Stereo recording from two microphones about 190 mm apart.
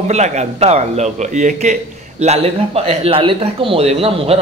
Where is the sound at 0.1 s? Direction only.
35° right (ahead or behind).